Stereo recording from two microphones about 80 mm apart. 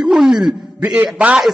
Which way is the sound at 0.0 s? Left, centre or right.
Centre.